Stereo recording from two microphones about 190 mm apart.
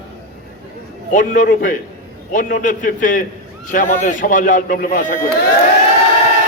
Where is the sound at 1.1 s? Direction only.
45° left (ahead or behind).